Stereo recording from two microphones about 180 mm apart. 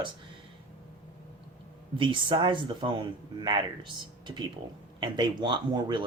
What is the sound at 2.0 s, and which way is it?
Speech, 25° right (ahead or behind).